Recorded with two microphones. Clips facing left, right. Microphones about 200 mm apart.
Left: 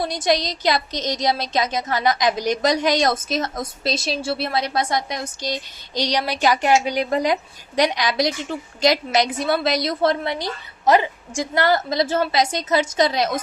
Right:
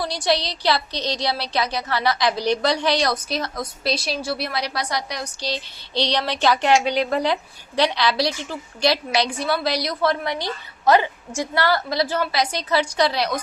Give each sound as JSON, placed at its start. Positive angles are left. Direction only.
{"t": 0.0, "sound": "a woman's voice", "side_deg": 20}